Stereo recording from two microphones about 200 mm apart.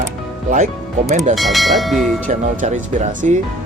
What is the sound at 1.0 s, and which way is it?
Speech, 40° right (ahead or behind).